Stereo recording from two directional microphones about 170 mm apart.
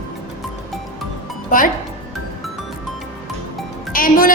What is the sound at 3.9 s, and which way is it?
Speech, 55° left (ahead or behind).